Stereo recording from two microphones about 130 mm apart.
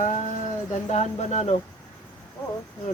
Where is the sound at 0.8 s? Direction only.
60° left (ahead or behind).